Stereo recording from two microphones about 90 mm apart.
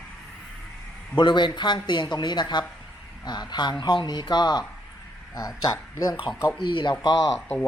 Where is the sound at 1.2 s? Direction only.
60° left (ahead or behind).